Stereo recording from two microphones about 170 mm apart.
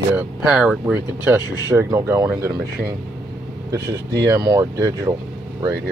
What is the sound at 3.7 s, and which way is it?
Speech, 20° right (ahead or behind).